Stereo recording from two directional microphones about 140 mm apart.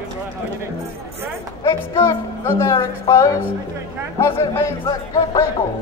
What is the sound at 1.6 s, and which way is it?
Speech, 35° left (ahead or behind).